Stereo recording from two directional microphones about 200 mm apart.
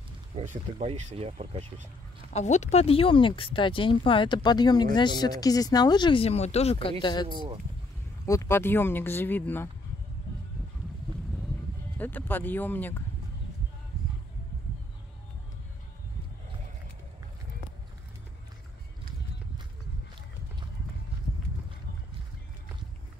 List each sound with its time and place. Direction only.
0.4 s speech: 35° right (ahead or behind)
2.3 s speech: 35° left (ahead or behind)
8.3 s speech: 15° left (ahead or behind)
12.0 s speech: 10° left (ahead or behind)